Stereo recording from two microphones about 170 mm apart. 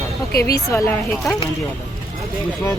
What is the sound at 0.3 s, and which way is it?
Speech, 65° left (ahead or behind).